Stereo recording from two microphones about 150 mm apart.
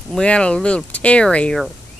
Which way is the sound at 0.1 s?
5° left (ahead or behind).